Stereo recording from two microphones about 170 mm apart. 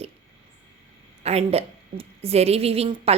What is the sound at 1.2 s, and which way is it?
A woman's voice, 35° right (ahead or behind).